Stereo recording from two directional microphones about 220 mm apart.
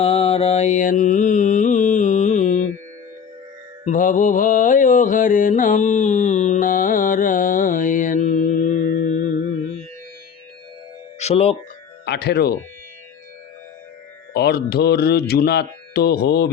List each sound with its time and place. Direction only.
0.0 s mantra: 25° left (ahead or behind)
3.8 s mantra: 35° left (ahead or behind)
11.2 s speech: 30° left (ahead or behind)
12.0 s speech: 50° left (ahead or behind)
14.3 s speech: 45° left (ahead or behind)